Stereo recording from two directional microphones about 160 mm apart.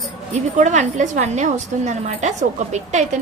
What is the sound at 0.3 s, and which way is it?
A woman's voice, 50° right (ahead or behind).